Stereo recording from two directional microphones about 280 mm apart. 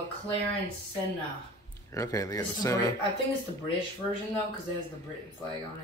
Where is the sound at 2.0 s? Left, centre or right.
Centre.